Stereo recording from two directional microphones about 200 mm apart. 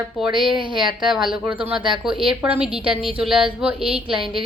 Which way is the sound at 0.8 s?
Centre (ahead or behind).